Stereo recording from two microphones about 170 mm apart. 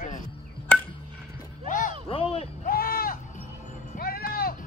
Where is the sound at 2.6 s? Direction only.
60° left (ahead or behind).